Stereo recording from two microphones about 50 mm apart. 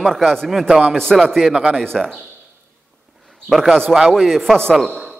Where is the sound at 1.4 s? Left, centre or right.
Centre.